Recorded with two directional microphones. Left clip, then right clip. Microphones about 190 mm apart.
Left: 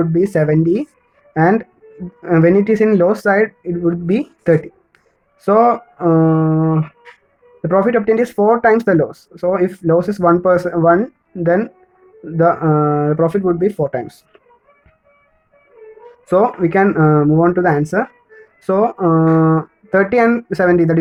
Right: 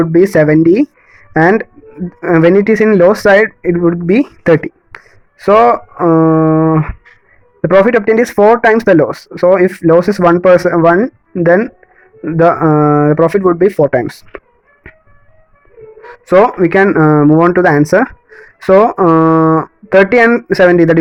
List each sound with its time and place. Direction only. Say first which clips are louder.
0.0 s speech: right 7 dB; 40° right (ahead or behind)
16.0 s a sound: right 6 dB; 40° right (ahead or behind)
16.6 s speech: right 5 dB; 40° right (ahead or behind)